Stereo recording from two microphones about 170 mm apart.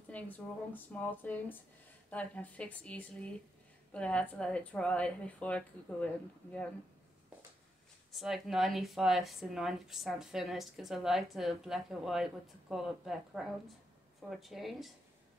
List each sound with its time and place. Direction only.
0.1 s a woman's voice: 10° left (ahead or behind)
8.1 s speech: centre (ahead or behind)